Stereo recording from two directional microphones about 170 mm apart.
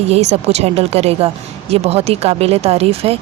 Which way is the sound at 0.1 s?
40° right (ahead or behind).